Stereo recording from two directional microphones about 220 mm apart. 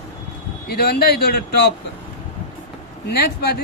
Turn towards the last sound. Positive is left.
turn(degrees=45)  # may be behind; listen again after turning